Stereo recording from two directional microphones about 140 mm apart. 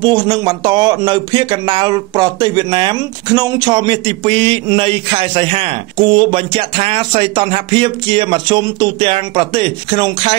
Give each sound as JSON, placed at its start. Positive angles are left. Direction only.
{"t": 0.0, "sound": "speech", "side_deg": -35}